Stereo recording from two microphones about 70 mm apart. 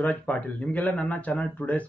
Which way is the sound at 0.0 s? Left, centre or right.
Left.